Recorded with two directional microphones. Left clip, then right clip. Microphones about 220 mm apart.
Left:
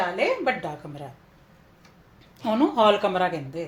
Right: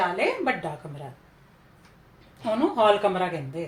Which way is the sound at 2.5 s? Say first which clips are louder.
Left 1 dB; 40° left (ahead or behind).